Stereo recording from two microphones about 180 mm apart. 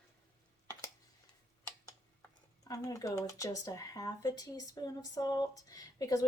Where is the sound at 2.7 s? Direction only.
20° left (ahead or behind).